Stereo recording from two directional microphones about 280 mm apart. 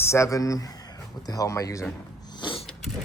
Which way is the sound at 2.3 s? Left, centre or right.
Centre.